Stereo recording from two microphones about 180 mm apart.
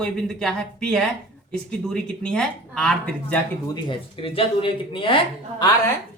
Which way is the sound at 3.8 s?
30° left (ahead or behind).